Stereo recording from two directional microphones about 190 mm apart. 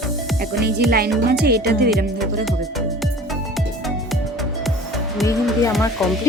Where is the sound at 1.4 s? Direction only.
55° right (ahead or behind).